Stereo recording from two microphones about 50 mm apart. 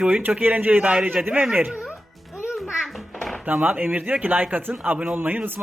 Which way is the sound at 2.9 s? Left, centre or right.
Centre.